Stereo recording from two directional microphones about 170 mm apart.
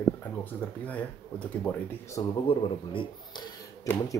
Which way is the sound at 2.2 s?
25° left (ahead or behind).